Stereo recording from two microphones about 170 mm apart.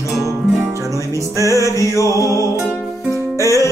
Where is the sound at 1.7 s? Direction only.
20° left (ahead or behind).